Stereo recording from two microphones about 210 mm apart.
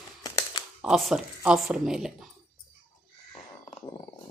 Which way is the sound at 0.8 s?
Centre (ahead or behind).